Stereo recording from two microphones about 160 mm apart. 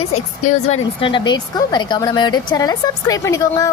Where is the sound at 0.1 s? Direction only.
45° left (ahead or behind).